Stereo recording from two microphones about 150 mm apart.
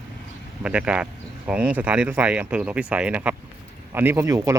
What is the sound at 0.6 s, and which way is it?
Speech, 5° right (ahead or behind).